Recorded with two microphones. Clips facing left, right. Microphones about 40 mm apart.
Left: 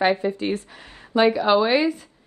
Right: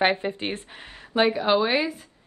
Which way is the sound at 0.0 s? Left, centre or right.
Right.